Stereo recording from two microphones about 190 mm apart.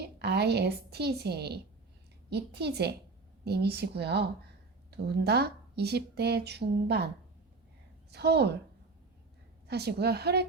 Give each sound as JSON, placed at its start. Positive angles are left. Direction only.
{"t": 0.2, "sound": "a woman's voice", "side_deg": -60}
{"t": 8.1, "sound": "speech", "side_deg": -60}
{"t": 9.6, "sound": "speech", "side_deg": -60}